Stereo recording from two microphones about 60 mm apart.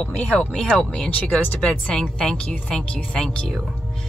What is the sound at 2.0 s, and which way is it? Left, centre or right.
Speech, centre.